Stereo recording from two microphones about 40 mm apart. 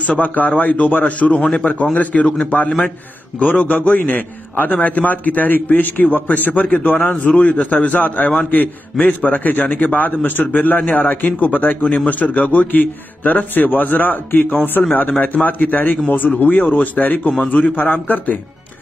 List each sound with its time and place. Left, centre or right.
0.0 s a man's voice: left
2.2 s a man's voice: left
3.3 s a man's voice: left